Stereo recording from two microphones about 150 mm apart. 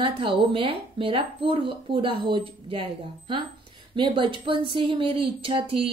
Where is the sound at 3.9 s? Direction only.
35° right (ahead or behind).